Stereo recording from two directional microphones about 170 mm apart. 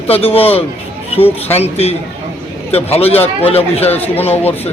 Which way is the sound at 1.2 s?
10° left (ahead or behind).